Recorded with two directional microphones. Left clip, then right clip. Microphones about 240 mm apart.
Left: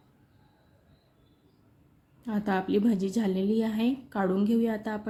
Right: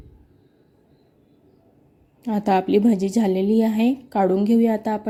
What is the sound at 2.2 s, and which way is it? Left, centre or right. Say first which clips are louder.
A woman's voice: right 10 dB; right.